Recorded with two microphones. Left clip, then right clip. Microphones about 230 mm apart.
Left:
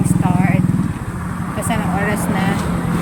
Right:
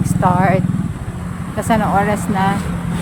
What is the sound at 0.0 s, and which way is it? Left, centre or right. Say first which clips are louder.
Vehicle: right 5 dB; right.